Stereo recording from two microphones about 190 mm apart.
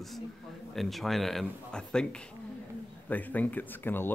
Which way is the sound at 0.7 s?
Centre (ahead or behind).